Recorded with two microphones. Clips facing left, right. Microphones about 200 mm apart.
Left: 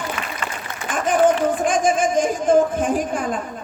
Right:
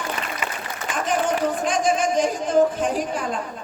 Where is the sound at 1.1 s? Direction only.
50° left (ahead or behind).